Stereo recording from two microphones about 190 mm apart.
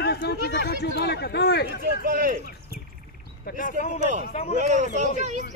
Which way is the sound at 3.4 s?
45° left (ahead or behind).